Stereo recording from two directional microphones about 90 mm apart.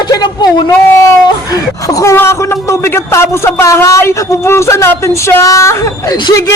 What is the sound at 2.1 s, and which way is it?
A man's voice, 30° left (ahead or behind).